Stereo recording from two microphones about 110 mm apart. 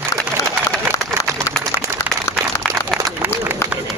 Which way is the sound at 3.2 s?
15° right (ahead or behind).